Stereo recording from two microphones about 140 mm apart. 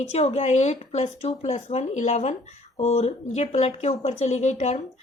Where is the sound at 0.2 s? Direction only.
50° left (ahead or behind).